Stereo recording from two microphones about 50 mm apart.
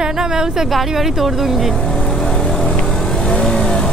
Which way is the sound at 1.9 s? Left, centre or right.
Centre.